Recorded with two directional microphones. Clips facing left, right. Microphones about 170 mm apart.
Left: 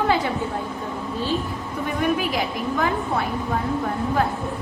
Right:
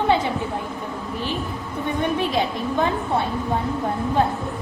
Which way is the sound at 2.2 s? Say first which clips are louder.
Right 2 dB; 25° right (ahead or behind).